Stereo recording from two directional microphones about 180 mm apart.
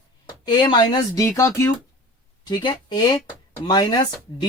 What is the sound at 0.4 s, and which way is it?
Speech, 25° left (ahead or behind).